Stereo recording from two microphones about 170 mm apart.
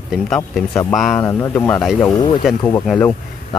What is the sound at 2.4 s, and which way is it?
Speech, 5° right (ahead or behind).